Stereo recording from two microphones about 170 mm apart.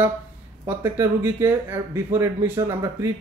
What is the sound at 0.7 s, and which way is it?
Speech, 15° right (ahead or behind).